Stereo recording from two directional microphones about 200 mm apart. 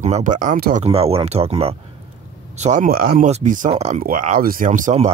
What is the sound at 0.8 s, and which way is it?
Speech, 30° right (ahead or behind).